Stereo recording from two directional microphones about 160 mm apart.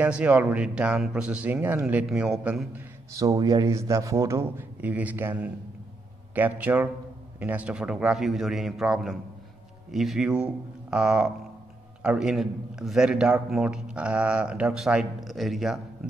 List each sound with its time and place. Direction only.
0.0 s speech: 10° right (ahead or behind)
3.1 s a man's voice: 20° right (ahead or behind); by 15.8 s centre (ahead or behind)